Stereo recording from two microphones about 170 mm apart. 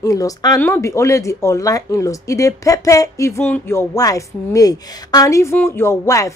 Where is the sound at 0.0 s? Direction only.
20° left (ahead or behind).